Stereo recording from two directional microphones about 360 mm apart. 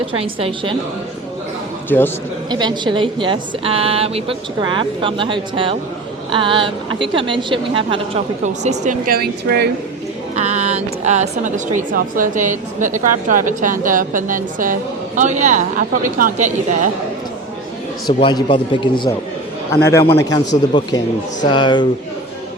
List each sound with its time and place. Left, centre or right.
0.1 s speech: centre
2.5 s speech: centre
18.2 s a man's voice: centre